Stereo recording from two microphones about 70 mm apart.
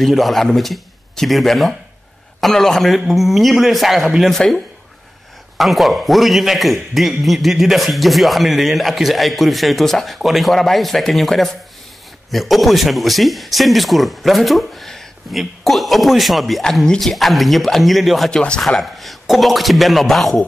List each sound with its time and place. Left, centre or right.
0.0 s speech: centre
5.6 s speech: centre